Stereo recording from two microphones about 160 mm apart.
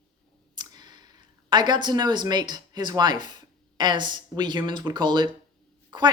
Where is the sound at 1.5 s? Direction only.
30° right (ahead or behind).